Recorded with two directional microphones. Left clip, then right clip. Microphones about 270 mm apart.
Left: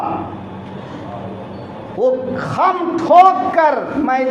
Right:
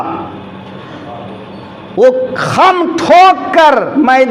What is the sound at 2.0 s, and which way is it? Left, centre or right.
A man's voice, right.